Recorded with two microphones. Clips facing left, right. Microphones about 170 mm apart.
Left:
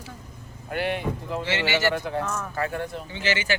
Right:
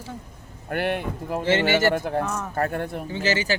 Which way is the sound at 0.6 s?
55° right (ahead or behind).